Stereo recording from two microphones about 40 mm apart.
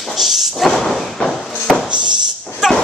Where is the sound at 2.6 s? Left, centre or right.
Centre.